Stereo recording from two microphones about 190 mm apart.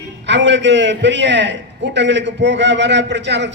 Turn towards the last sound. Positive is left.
turn(degrees=-65)  # may be behind; listen again after turning